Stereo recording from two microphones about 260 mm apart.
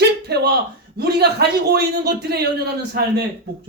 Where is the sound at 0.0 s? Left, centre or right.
Right.